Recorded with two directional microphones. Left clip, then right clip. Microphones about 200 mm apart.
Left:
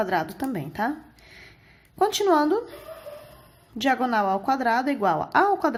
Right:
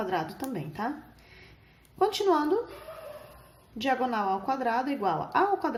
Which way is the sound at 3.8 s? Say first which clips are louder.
Left 5 dB; 45° left (ahead or behind).